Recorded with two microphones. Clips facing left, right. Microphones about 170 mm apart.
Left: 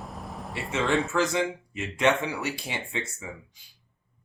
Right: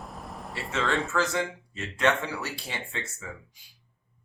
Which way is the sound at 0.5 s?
20° left (ahead or behind).